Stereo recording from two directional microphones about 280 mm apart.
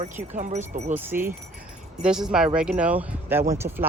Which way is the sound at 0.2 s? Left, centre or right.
Right.